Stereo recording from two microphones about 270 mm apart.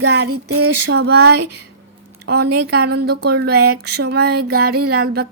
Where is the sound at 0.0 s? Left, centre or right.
Right.